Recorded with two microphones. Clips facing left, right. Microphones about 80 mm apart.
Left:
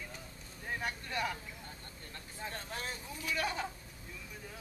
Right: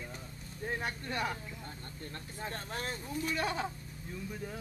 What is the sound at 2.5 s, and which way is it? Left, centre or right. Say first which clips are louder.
Speech: right 3 dB; right.